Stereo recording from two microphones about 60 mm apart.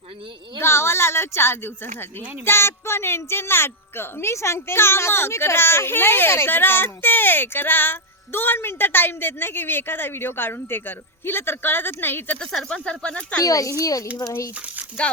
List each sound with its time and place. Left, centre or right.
0.6 s speech: left
12.6 s speech: centre
13.4 s speech: left